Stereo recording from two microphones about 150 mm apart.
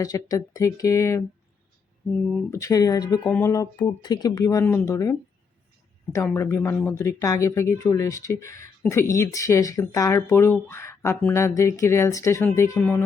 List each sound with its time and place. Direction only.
0.0 s speech: 25° left (ahead or behind)
2.5 s speech: 20° left (ahead or behind)
3.2 s speech: 10° left (ahead or behind)
3.5 s speech: 25° left (ahead or behind)
6.1 s speech: 20° left (ahead or behind)